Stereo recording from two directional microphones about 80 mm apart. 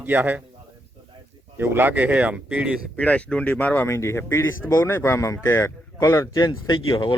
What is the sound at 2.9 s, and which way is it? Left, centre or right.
Speech, centre.